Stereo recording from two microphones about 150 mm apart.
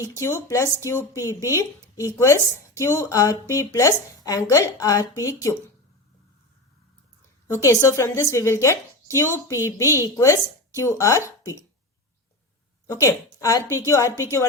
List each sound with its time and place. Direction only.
0.0 s a woman's voice: 20° left (ahead or behind)
7.4 s a woman's voice: 20° left (ahead or behind)
12.9 s a woman's voice: 20° left (ahead or behind)